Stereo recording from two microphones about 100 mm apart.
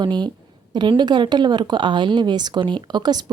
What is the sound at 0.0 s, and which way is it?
Speech, 45° right (ahead or behind).